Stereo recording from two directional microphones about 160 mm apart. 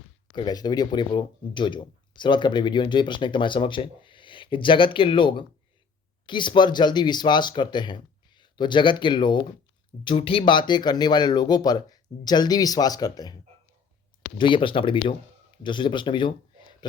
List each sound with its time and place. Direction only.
0.3 s speech: 25° left (ahead or behind)
14.3 s a man's voice: 30° left (ahead or behind)